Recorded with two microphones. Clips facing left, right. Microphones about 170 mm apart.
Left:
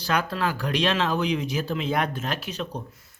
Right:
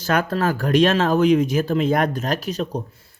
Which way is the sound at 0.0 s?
50° right (ahead or behind).